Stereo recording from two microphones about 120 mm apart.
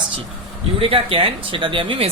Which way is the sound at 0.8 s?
50° right (ahead or behind).